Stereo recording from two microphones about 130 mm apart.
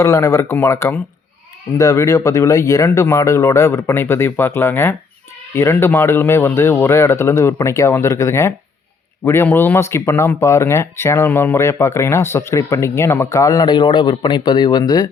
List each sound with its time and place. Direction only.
0.0 s speech: 20° left (ahead or behind)